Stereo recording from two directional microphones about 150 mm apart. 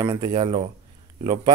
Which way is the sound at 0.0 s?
35° right (ahead or behind).